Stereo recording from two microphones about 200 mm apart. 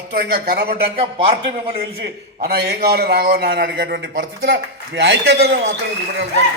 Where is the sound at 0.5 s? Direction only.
55° right (ahead or behind).